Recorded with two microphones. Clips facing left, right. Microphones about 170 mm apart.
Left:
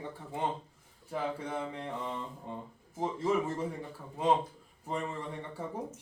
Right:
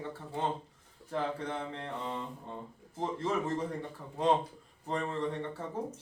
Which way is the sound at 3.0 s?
10° left (ahead or behind).